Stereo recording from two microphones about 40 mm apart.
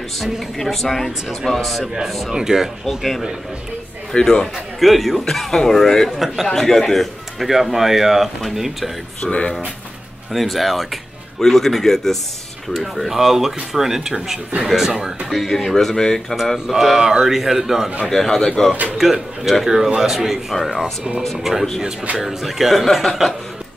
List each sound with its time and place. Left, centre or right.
0.6 s a man's voice: centre
2.3 s a man's voice: centre
4.1 s speech: centre
4.7 s a man's voice: centre
6.0 s a man's voice: centre
6.4 s a man's voice: centre
9.2 s speech: left
10.3 s a man's voice: centre
12.7 s speech: centre
15.2 s speech: centre
16.5 s speech: centre
18.0 s speech: centre
18.9 s speech: centre
20.5 s a man's voice: centre